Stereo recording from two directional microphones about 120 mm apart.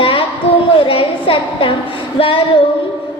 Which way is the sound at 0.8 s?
50° left (ahead or behind).